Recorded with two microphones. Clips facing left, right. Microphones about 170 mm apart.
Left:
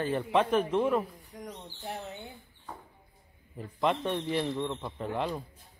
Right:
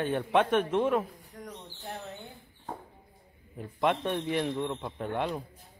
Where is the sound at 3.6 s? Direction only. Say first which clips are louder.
Right 1 dB; centre (ahead or behind).